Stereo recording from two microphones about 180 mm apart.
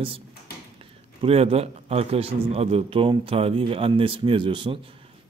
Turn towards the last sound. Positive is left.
turn(degrees=-30)  # may be behind; listen again after turning